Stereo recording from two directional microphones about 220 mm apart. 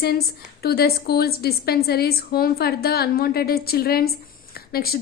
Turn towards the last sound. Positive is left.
turn(degrees=45)  # may be behind; listen again after turning